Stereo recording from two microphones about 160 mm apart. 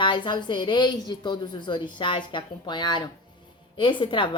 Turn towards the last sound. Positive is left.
turn(degrees=30)  # may be behind; listen again after turning